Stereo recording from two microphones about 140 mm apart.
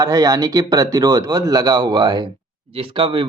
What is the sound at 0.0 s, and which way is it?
Speech, 25° right (ahead or behind).